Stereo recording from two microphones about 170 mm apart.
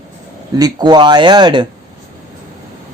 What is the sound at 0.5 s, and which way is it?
Speech, 25° right (ahead or behind).